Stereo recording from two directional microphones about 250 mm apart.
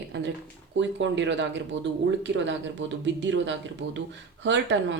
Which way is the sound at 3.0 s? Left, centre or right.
Right.